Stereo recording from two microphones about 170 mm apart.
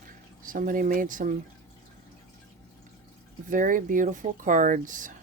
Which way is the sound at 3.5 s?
50° right (ahead or behind).